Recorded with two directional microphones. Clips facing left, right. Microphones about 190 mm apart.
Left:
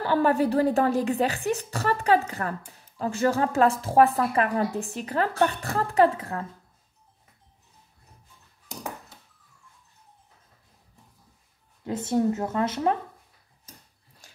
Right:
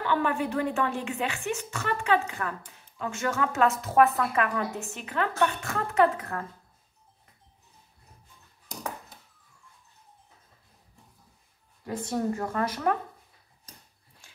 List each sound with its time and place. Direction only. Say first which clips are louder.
0.0 s a woman's voice: left 5 dB; 35° left (ahead or behind)
11.8 s speech: left 5 dB; 25° left (ahead or behind)
14.2 s a sound: left 4 dB; 40° left (ahead or behind)